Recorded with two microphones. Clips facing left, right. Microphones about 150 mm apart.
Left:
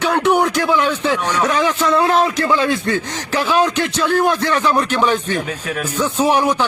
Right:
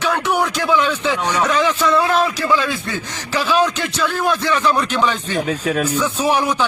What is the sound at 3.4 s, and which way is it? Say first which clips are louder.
A man's voice: left 1 dB; 15° left (ahead or behind).